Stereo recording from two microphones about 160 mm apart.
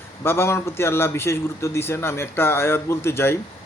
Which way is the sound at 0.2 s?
15° left (ahead or behind).